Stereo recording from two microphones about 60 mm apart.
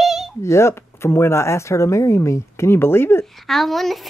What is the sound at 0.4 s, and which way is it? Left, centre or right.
Speech, left.